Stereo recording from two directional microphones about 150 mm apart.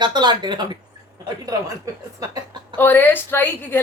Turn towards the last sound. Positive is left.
turn(degrees=15)  # may be behind; listen again after turning